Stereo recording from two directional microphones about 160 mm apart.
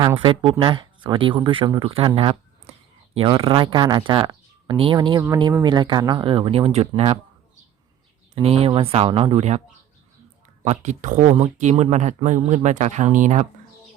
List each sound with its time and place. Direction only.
0.2 s speech: 30° right (ahead or behind)
8.4 s speech: 40° right (ahead or behind)
10.6 s speech: 45° right (ahead or behind)